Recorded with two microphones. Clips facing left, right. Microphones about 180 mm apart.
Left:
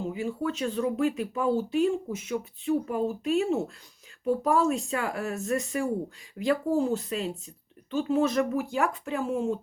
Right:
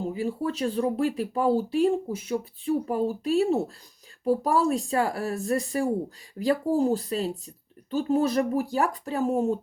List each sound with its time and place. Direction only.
0.0 s speech: 35° right (ahead or behind)